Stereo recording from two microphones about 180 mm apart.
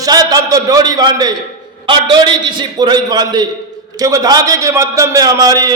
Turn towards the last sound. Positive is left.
turn(degrees=-20)  # may be behind; listen again after turning